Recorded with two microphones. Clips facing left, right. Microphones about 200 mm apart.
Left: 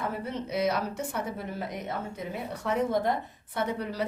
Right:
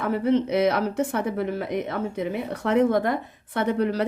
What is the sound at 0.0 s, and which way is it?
Speech, 70° right (ahead or behind).